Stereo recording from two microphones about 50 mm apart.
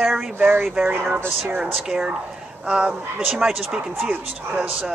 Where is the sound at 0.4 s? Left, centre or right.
Right.